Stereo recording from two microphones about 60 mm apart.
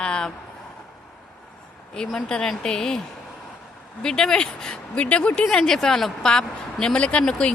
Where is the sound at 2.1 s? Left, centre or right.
Centre.